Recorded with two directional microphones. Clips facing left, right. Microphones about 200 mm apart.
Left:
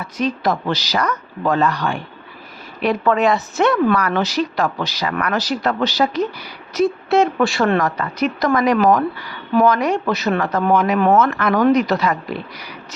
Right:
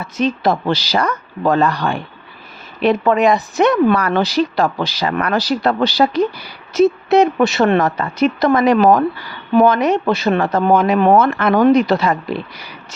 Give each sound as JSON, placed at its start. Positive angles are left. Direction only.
{"t": 0.0, "sound": "speech", "side_deg": -25}
{"t": 4.0, "sound": "speech", "side_deg": -30}